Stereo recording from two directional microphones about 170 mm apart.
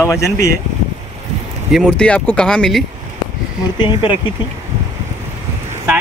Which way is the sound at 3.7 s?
25° left (ahead or behind).